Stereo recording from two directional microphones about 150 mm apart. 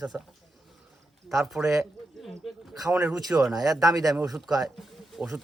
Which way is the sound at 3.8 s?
25° right (ahead or behind).